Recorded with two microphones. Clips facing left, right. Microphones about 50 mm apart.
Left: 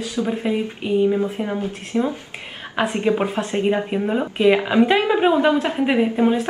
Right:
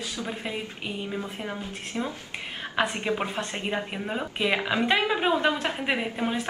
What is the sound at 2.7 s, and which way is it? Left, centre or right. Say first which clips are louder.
A woman's voice: left 7 dB; centre.